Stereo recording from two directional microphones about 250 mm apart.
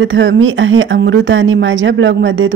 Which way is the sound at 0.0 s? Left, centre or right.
Right.